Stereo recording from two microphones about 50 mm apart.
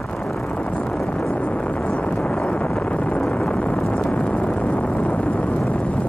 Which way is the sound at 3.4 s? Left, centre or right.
Centre.